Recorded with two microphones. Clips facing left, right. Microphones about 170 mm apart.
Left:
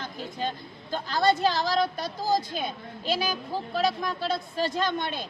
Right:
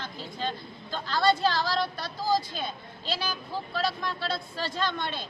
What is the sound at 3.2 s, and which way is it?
Speech, 15° left (ahead or behind).